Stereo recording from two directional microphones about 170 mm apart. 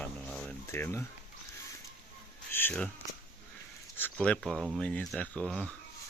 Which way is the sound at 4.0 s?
5° left (ahead or behind).